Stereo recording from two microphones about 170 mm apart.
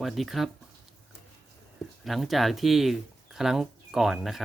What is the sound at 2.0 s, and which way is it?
Speech, centre (ahead or behind).